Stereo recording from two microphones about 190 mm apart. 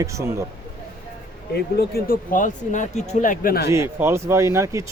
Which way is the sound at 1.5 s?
55° left (ahead or behind).